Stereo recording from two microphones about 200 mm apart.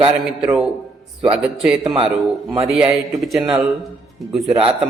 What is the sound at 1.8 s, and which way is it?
Speech, 25° right (ahead or behind).